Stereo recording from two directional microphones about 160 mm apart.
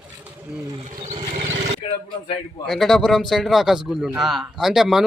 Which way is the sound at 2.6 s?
Centre (ahead or behind).